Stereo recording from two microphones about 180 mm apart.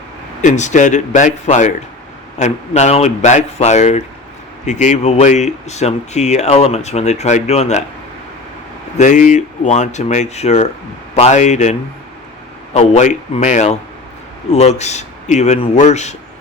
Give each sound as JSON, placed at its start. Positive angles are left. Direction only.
{"t": 0.4, "sound": "speech", "side_deg": 40}
{"t": 9.0, "sound": "speech", "side_deg": 45}